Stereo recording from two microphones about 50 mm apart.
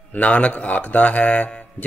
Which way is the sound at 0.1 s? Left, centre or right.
Left.